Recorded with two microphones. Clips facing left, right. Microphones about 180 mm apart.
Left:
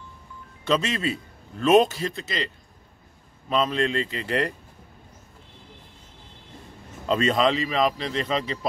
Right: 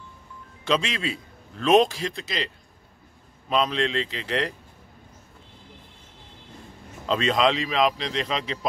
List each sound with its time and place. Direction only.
0.7 s a man's voice: 5° left (ahead or behind)
7.1 s a man's voice: 5° left (ahead or behind)